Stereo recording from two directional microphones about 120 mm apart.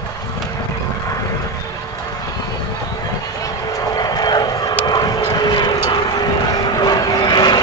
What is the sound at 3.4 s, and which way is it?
Vehicle, 30° left (ahead or behind).